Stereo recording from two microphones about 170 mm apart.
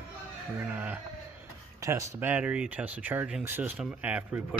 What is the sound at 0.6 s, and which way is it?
Speech, 10° right (ahead or behind).